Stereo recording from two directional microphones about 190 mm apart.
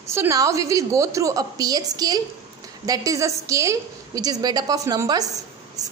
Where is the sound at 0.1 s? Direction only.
15° right (ahead or behind).